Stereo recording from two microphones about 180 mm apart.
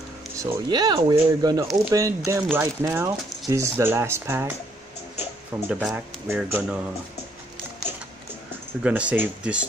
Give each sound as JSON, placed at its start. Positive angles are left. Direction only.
{"t": 0.4, "sound": "speech", "side_deg": -20}
{"t": 5.7, "sound": "speech", "side_deg": -5}
{"t": 8.8, "sound": "speech", "side_deg": -5}